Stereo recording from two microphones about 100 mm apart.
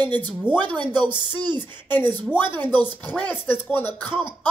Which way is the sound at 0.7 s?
50° right (ahead or behind).